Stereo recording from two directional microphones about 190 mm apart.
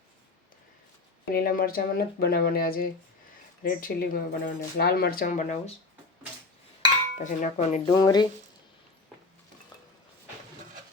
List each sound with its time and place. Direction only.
1.3 s speech: 50° left (ahead or behind)
7.2 s speech: 35° left (ahead or behind)
7.9 s speech: 20° left (ahead or behind)